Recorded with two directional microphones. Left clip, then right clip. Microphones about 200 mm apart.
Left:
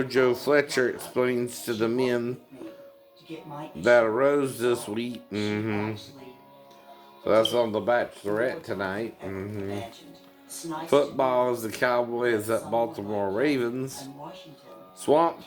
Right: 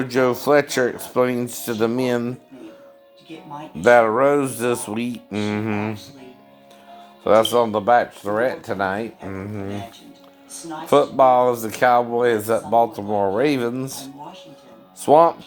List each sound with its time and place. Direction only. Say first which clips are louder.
0.0 s speech: right 4 dB; 45° right (ahead or behind)
3.8 s speech: right 6 dB; 40° right (ahead or behind)
7.5 s speech: right 8 dB; 45° right (ahead or behind)
10.8 s speech: right 8 dB; 45° right (ahead or behind)